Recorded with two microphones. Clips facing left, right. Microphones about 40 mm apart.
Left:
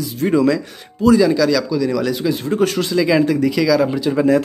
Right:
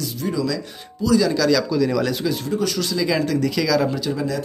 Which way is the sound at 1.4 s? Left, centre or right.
Centre.